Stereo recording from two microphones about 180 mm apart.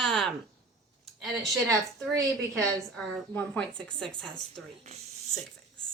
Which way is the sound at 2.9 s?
5° left (ahead or behind).